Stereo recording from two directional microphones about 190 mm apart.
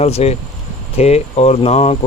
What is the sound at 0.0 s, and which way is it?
Speech, 35° left (ahead or behind).